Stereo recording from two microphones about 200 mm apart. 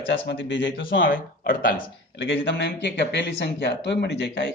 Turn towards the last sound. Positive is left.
turn(degrees=60)  # may be behind; listen again after turning